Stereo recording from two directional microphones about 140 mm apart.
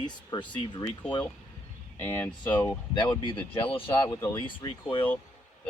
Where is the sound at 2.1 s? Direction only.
15° left (ahead or behind).